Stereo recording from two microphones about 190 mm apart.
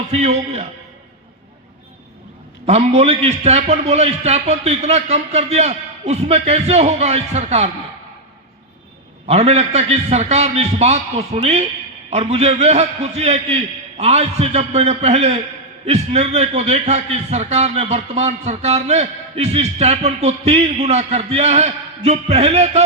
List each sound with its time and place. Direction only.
0.1 s a man's voice: 35° right (ahead or behind)
2.6 s a man's voice: 35° right (ahead or behind)
9.2 s a man's voice: 35° right (ahead or behind)